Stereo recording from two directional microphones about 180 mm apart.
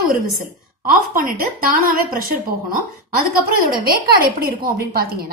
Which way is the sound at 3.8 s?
55° right (ahead or behind).